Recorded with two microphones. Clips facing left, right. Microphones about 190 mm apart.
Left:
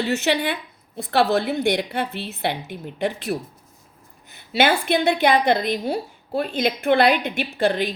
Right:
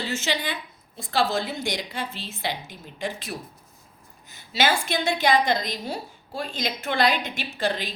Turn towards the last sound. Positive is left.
turn(degrees=55)  # may be behind; listen again after turning